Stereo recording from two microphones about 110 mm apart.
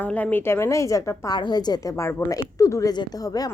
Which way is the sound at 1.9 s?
25° left (ahead or behind).